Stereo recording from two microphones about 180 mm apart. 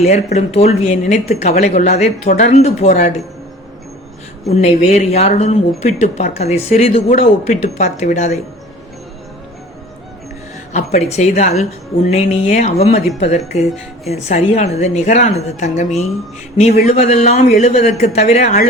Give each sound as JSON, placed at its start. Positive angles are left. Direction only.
{"t": 0.0, "sound": "speech", "side_deg": 40}
{"t": 4.4, "sound": "speech", "side_deg": 35}
{"t": 10.7, "sound": "speech", "side_deg": 40}